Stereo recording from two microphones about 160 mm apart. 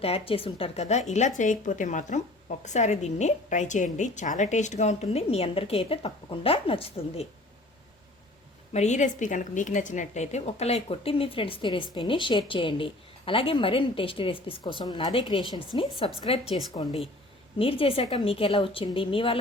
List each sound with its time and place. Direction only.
0.0 s a woman's voice: 35° left (ahead or behind)
8.7 s a woman's voice: 45° left (ahead or behind)
17.6 s a woman's voice: 35° left (ahead or behind)